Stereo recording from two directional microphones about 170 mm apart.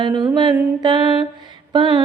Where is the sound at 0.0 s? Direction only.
25° right (ahead or behind).